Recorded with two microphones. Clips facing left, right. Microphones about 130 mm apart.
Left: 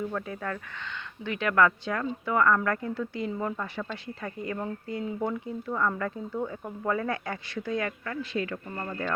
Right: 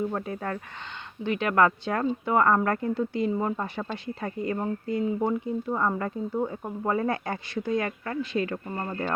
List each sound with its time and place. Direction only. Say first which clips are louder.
0.1 s speech: right 2 dB; 35° right (ahead or behind)